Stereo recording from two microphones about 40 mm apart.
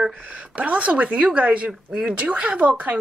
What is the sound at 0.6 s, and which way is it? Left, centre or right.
Speech, right.